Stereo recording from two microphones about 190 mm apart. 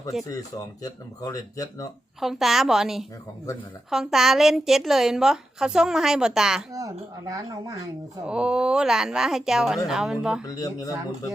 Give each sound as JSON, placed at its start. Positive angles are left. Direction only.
{"t": 0.1, "sound": "a woman's voice", "side_deg": 0}
{"t": 0.8, "sound": "speech", "side_deg": 15}
{"t": 2.2, "sound": "a woman's voice", "side_deg": 0}
{"t": 6.7, "sound": "speech", "side_deg": -20}
{"t": 8.3, "sound": "a woman's voice", "side_deg": -5}
{"t": 10.4, "sound": "speech", "side_deg": 20}